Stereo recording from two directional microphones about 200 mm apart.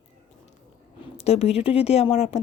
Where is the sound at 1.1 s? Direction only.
30° left (ahead or behind).